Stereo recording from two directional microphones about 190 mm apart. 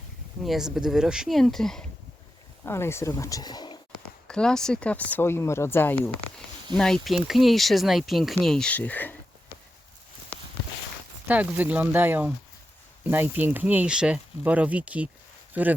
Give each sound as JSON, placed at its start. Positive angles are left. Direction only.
{"t": 0.4, "sound": "speech", "side_deg": 0}
{"t": 2.6, "sound": "speech", "side_deg": 15}
{"t": 4.3, "sound": "speech", "side_deg": 5}
{"t": 11.3, "sound": "speech", "side_deg": -10}